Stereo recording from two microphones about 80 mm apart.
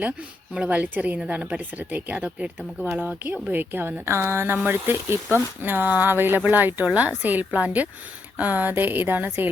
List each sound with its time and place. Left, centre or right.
0.0 s speech: centre